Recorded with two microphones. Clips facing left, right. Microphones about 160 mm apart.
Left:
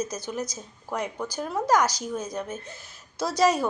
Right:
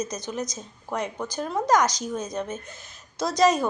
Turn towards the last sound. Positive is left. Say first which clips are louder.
# right 2 dB
turn(degrees=10)  # may be behind; listen again after turning